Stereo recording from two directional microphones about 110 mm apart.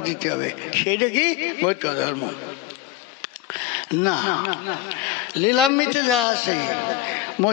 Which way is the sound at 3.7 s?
20° left (ahead or behind).